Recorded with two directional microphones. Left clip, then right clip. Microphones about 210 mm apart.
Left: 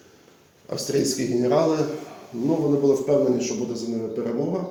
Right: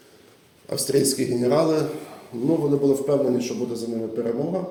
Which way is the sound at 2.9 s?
25° right (ahead or behind).